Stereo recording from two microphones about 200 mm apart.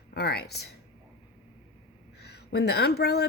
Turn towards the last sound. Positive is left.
turn(degrees=55)  # may be behind; listen again after turning